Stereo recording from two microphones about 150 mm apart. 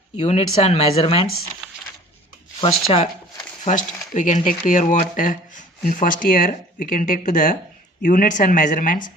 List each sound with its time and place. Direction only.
0.2 s speech: 45° left (ahead or behind)
2.6 s speech: 45° left (ahead or behind)
3.6 s speech: 55° left (ahead or behind)